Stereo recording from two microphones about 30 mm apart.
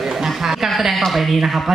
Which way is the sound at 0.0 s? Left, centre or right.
Centre.